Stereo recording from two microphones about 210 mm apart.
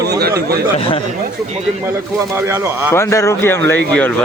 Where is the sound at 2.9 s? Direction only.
15° left (ahead or behind).